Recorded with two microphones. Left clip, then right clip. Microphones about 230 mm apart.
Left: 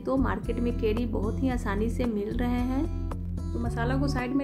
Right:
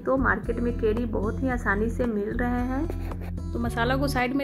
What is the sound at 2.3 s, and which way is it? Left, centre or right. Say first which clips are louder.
Speech: right 3 dB; left.